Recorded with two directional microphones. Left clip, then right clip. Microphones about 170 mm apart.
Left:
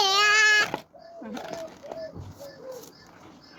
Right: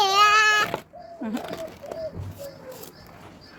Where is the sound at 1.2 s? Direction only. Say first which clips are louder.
Right 8 dB; 55° right (ahead or behind).